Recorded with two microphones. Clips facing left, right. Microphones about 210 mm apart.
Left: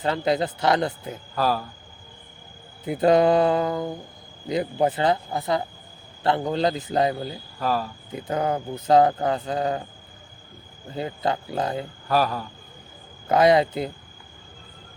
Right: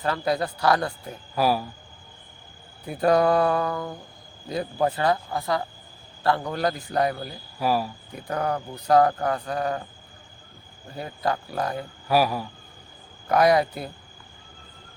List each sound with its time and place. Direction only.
0.0 s speech: 20° left (ahead or behind)
1.4 s a man's voice: 10° right (ahead or behind)
2.8 s speech: 20° left (ahead or behind)
7.6 s a man's voice: 10° right (ahead or behind)
8.1 s speech: 20° left (ahead or behind)
10.9 s speech: 25° left (ahead or behind)
12.0 s a man's voice: 10° right (ahead or behind)
13.2 s speech: 25° left (ahead or behind)